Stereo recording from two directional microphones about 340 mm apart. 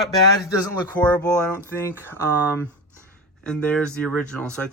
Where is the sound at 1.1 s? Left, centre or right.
Centre.